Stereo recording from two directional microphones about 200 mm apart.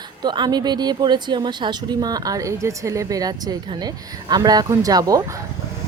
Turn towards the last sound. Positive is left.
turn(degrees=-15)  # may be behind; listen again after turning